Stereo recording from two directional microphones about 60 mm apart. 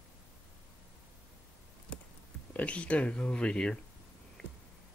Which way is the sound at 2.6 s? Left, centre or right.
Left.